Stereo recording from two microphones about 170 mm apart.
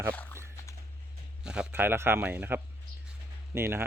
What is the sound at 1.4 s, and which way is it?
Speech, 5° right (ahead or behind).